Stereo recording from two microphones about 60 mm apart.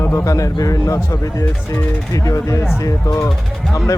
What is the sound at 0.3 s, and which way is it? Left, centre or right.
Speech, left.